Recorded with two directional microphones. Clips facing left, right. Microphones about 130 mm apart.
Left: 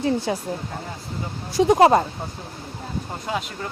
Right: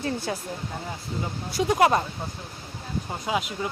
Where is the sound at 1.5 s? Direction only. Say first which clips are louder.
Left 6 dB; 25° left (ahead or behind).